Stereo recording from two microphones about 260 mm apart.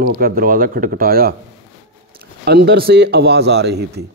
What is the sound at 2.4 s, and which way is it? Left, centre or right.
A man's voice, right.